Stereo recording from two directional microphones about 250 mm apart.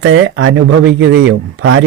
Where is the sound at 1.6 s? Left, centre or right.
Right.